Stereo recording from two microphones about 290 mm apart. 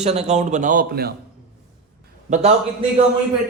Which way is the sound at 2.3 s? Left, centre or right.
Right.